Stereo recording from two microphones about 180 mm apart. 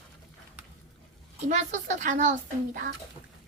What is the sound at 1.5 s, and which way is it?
Speech, 45° right (ahead or behind).